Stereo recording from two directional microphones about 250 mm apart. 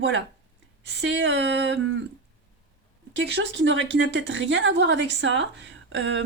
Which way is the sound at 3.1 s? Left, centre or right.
Right.